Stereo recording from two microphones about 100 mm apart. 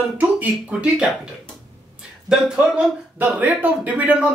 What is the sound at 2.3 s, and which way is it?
A man's voice, 10° right (ahead or behind).